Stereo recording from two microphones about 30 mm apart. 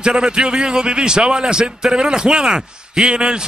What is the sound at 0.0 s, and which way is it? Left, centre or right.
A man's voice, right.